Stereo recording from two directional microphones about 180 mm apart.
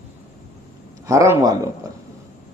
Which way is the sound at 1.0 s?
15° right (ahead or behind).